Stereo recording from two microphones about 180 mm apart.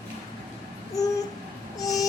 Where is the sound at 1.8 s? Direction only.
20° left (ahead or behind).